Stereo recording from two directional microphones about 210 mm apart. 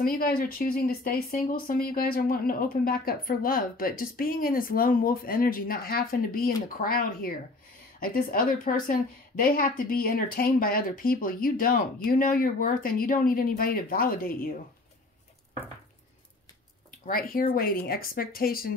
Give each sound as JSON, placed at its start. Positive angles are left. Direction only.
{"t": 0.0, "sound": "speech", "side_deg": 45}
{"t": 17.0, "sound": "speech", "side_deg": 45}